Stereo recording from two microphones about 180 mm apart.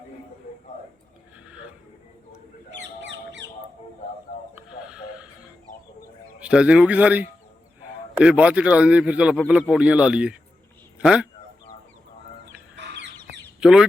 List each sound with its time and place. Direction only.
2.6 s bird: 75° right (ahead or behind)
4.9 s music: 5° right (ahead or behind)
6.4 s a man's voice: 5° right (ahead or behind)
12.7 s bird: 75° right (ahead or behind)
13.6 s speech: 5° right (ahead or behind)